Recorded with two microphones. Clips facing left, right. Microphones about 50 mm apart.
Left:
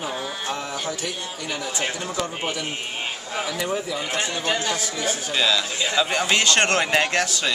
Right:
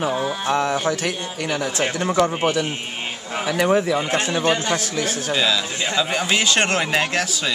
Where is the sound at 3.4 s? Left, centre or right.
Right.